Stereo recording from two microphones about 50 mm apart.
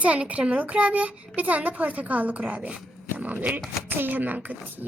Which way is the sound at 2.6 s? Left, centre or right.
Right.